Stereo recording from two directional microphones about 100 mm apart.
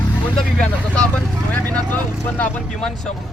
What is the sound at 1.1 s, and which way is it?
Speech, 15° left (ahead or behind).